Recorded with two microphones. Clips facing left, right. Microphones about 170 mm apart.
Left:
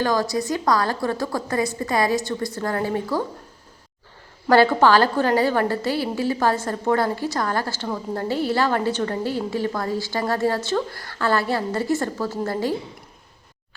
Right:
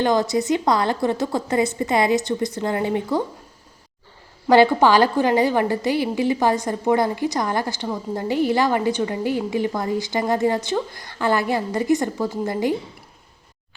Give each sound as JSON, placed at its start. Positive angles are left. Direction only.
{"t": 0.0, "sound": "a woman's voice", "side_deg": -20}
{"t": 4.4, "sound": "a woman's voice", "side_deg": -15}